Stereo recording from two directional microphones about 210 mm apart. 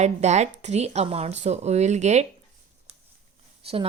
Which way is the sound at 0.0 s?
35° right (ahead or behind).